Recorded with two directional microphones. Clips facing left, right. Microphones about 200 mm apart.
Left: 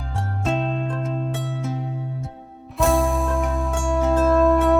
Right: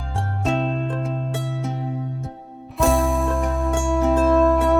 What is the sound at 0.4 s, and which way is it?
Music, centre (ahead or behind).